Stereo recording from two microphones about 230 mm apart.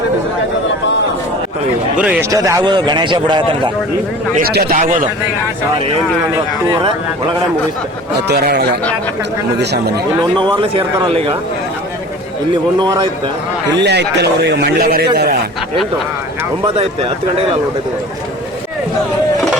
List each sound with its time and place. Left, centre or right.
2.0 s a man's voice: centre
4.4 s a man's voice: right
6.3 s speech: centre
8.3 s a man's voice: right
10.3 s a man's voice: right
12.8 s a man's voice: right
13.7 s a man's voice: right